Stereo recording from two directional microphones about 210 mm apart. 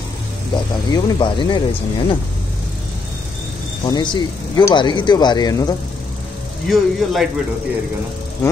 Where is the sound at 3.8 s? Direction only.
20° left (ahead or behind).